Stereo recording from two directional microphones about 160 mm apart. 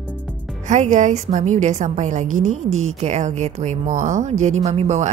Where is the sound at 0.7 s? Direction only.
50° right (ahead or behind).